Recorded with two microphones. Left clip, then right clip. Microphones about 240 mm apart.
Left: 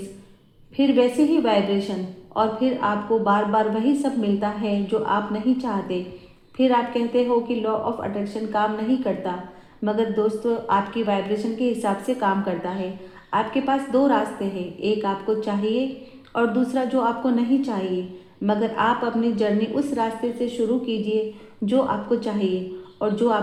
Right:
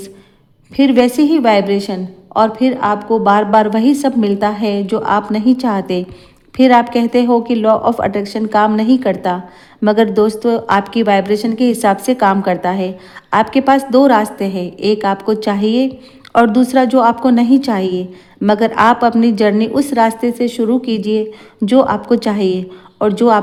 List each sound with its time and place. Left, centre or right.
0.8 s a woman's voice: right